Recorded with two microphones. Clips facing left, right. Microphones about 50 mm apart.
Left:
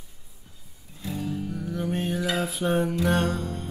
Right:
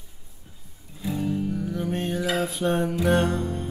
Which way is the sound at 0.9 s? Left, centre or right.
Centre.